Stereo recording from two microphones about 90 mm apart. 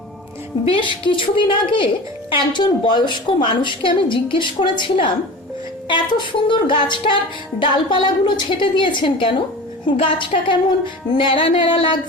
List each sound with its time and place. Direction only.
1.0 s a woman's voice: 65° left (ahead or behind)
11.2 s speech: 80° left